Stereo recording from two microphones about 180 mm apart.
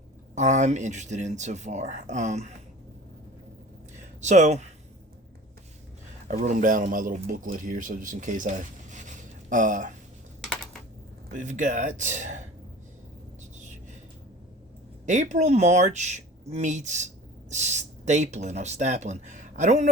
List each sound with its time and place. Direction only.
0.3 s speech: 40° right (ahead or behind)
4.2 s speech: 40° right (ahead or behind)
6.2 s speech: 40° right (ahead or behind)
11.3 s speech: 45° right (ahead or behind)
15.0 s speech: 40° right (ahead or behind)